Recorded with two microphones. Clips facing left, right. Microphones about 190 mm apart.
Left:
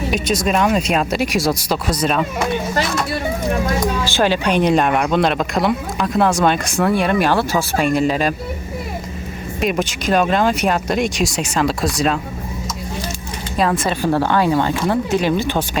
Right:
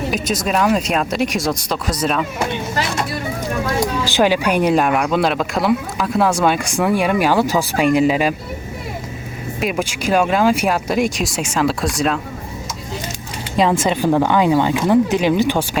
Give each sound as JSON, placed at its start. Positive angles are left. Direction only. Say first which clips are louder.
{"t": 0.1, "sound": "speech", "louder": "left 4 dB", "side_deg": 0}
{"t": 4.0, "sound": "speech", "louder": "right 4 dB", "side_deg": -15}
{"t": 9.6, "sound": "speech", "louder": "left 2 dB", "side_deg": -5}
{"t": 13.6, "sound": "speech", "louder": "right 2 dB", "side_deg": -20}